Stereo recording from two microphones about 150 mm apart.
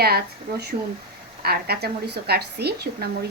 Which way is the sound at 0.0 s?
90° right.